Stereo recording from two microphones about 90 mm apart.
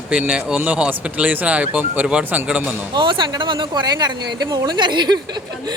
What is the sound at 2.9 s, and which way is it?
Speech, 65° right (ahead or behind).